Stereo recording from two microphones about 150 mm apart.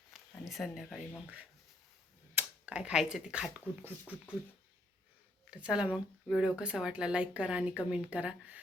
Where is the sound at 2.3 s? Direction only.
10° right (ahead or behind).